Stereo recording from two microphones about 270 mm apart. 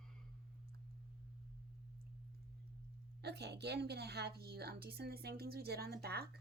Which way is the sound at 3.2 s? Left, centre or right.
Right.